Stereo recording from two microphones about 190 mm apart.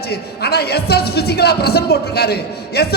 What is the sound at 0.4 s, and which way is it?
A man's voice, 55° left (ahead or behind).